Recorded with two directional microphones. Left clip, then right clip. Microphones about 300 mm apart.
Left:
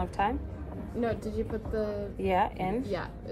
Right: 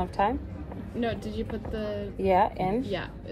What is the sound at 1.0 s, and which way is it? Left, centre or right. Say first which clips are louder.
Speech: even; left.